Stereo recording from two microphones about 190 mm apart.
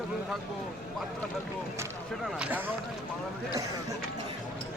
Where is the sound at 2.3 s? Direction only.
5° right (ahead or behind).